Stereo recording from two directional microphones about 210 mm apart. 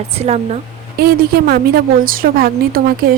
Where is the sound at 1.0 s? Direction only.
45° right (ahead or behind).